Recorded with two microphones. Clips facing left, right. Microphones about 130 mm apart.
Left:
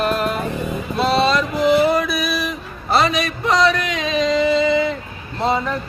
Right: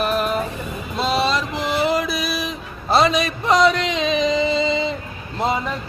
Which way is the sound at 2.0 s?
25° right (ahead or behind).